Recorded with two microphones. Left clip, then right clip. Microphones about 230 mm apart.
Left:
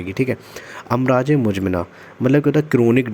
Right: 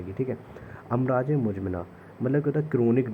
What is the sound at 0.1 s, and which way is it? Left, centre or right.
A man's voice, left.